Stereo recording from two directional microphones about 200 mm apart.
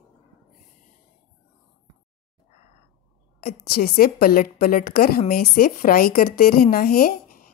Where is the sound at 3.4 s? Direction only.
50° left (ahead or behind).